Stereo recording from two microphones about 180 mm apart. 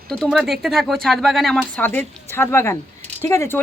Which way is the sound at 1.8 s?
10° left (ahead or behind).